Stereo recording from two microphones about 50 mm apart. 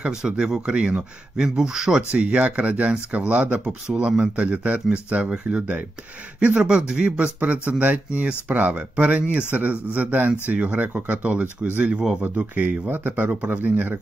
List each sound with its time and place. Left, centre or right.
0.0 s speech: centre
2.1 s speech: right
11.9 s speech: centre
12.2 s speech: right